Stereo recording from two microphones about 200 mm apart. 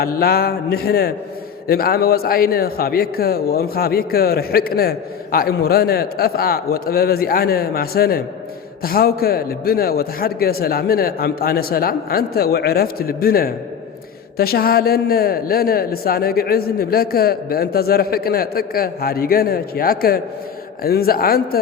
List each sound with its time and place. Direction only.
0.0 s a man's voice: 50° left (ahead or behind)